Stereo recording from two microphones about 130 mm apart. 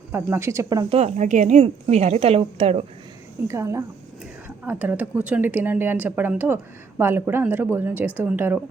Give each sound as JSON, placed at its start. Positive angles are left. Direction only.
{"t": 0.1, "sound": "speech", "side_deg": -15}
{"t": 0.9, "sound": "a woman's voice", "side_deg": -55}
{"t": 3.4, "sound": "a woman's voice", "side_deg": -20}